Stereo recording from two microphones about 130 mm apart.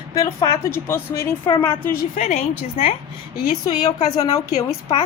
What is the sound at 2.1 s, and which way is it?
Speech, 65° left (ahead or behind).